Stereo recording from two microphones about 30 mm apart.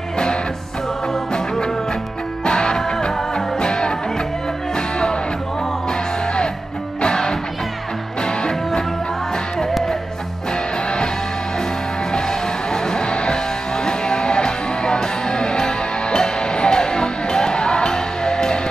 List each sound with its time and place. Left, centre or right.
2.4 s music: left
7.0 s music: left
12.1 s music: left